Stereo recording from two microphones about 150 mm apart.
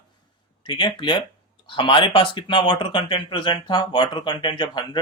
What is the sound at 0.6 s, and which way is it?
Speech, 30° left (ahead or behind).